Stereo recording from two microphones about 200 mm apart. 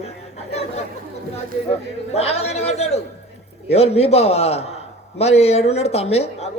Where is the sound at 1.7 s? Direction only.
30° left (ahead or behind).